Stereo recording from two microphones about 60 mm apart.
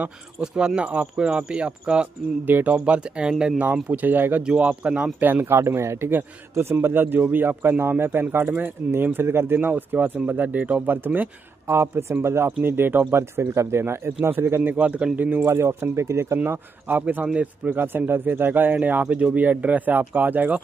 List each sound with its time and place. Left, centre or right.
0.4 s speech: centre
2.4 s speech: right
3.9 s speech: right
4.4 s speech: centre
5.2 s speech: right
11.6 s speech: right
15.4 s speech: right
16.4 s speech: right
17.7 s speech: right